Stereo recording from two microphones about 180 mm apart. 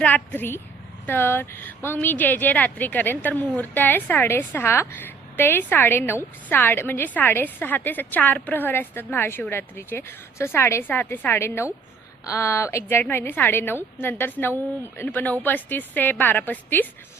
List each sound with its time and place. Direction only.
0.0 s speech: 10° left (ahead or behind)